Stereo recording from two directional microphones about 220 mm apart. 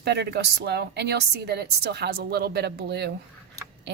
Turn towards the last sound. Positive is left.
turn(degrees=-50)  # may be behind; listen again after turning